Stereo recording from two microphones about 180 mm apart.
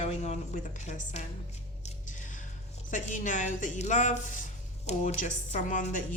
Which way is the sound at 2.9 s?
45° left (ahead or behind).